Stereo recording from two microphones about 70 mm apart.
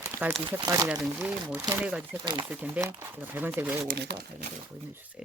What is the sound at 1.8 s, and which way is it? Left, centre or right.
Speech, centre.